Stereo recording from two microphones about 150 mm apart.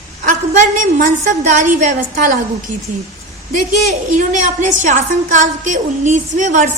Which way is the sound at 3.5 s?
60° right (ahead or behind).